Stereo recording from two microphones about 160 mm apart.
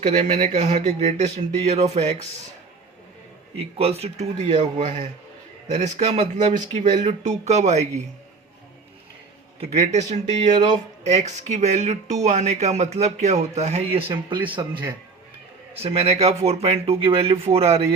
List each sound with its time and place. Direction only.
0.3 s speech: 45° right (ahead or behind)
3.6 s speech: 40° right (ahead or behind)
9.6 s speech: 45° right (ahead or behind)
14.1 s speech: 30° right (ahead or behind)